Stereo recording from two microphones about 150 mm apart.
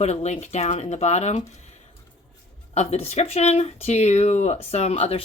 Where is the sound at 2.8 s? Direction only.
45° left (ahead or behind).